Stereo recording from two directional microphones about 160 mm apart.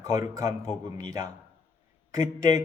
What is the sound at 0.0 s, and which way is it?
Speech, 20° right (ahead or behind).